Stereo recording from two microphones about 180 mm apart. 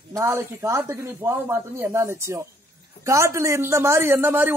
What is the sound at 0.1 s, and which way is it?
A man's voice, 15° right (ahead or behind).